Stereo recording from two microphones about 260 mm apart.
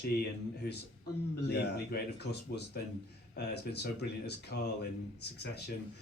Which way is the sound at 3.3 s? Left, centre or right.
Left.